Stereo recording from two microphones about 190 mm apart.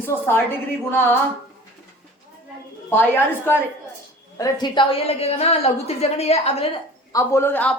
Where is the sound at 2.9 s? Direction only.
10° left (ahead or behind); by 6.6 s 35° left (ahead or behind).